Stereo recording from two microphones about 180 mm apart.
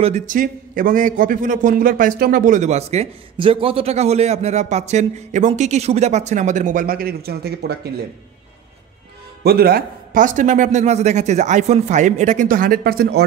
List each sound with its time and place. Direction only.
0.0 s a man's voice: 45° right (ahead or behind); by 7.7 s 60° right (ahead or behind)
9.4 s a man's voice: 60° right (ahead or behind)